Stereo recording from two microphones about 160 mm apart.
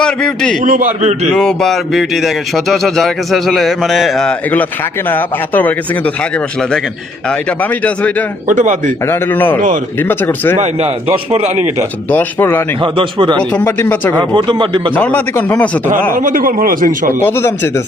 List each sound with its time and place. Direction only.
0.0 s speech: 5° left (ahead or behind)
0.6 s a man's voice: 55° right (ahead or behind)
1.3 s speech: 5° left (ahead or behind)
7.3 s speech: 10° left (ahead or behind)
8.4 s a man's voice: 50° right (ahead or behind)
9.0 s speech: 15° left (ahead or behind)
10.6 s a man's voice: 40° right (ahead or behind)
12.1 s speech: 15° left (ahead or behind)
12.8 s a man's voice: 30° right (ahead or behind)
13.5 s speech: 15° left (ahead or behind)
14.2 s a man's voice: 30° right (ahead or behind)
14.9 s speech: 10° left (ahead or behind)
16.1 s a man's voice: 60° right (ahead or behind)
17.2 s speech: 15° left (ahead or behind)